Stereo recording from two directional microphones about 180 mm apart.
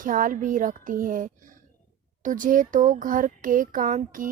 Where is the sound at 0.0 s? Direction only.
50° right (ahead or behind).